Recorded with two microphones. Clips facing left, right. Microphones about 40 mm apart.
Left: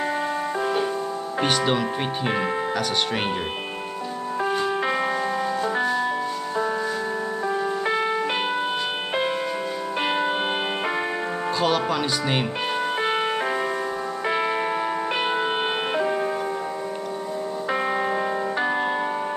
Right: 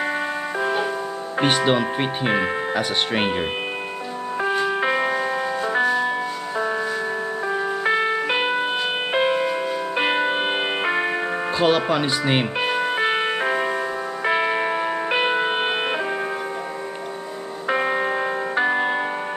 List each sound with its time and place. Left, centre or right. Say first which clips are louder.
1.4 s speech: right 3 dB; centre
4.4 s music: right 2 dB; centre
7.4 s music: right 2 dB; centre
17.6 s music: right 4 dB; centre